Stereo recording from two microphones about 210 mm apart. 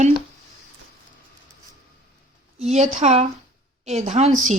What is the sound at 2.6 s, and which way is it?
Speech, 30° right (ahead or behind).